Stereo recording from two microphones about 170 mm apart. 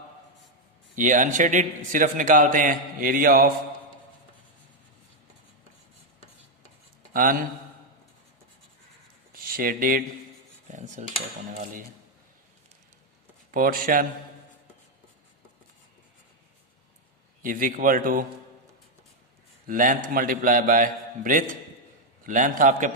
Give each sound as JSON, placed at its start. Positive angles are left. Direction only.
{"t": 0.9, "sound": "a man's voice", "side_deg": -50}
{"t": 7.1, "sound": "speech", "side_deg": -55}
{"t": 9.3, "sound": "speech", "side_deg": -55}
{"t": 10.7, "sound": "cutlery", "side_deg": -45}
{"t": 11.5, "sound": "a man's voice", "side_deg": -50}
{"t": 13.5, "sound": "speech", "side_deg": -55}
{"t": 17.4, "sound": "a man's voice", "side_deg": -50}
{"t": 19.6, "sound": "a man's voice", "side_deg": -50}